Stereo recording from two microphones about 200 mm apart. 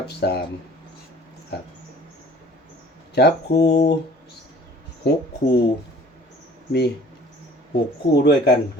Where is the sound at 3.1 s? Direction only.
55° left (ahead or behind).